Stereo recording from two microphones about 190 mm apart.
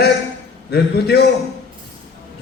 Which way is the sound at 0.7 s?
60° left (ahead or behind).